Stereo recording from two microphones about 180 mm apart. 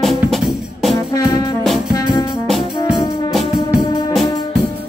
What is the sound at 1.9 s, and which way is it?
Brass instrument, 20° left (ahead or behind).